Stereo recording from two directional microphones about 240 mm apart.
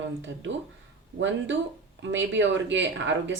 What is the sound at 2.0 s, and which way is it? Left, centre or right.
Speech, right.